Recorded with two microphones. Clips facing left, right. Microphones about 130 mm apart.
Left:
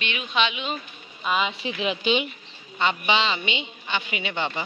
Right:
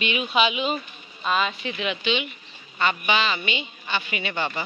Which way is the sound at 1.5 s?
30° left (ahead or behind).